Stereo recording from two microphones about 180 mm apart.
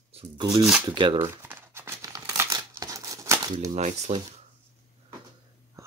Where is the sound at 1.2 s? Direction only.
15° right (ahead or behind).